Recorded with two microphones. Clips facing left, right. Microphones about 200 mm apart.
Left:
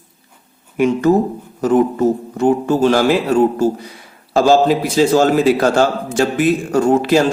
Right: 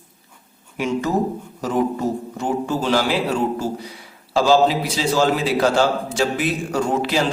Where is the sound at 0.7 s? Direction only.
55° left (ahead or behind).